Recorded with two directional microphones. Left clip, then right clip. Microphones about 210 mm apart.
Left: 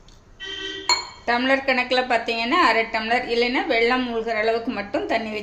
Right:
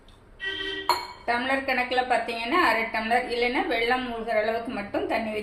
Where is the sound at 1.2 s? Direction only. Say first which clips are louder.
Left 5 dB; 55° left (ahead or behind).